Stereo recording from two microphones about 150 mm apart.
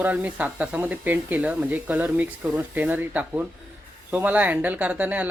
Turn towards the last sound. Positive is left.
turn(degrees=-10)  # may be behind; listen again after turning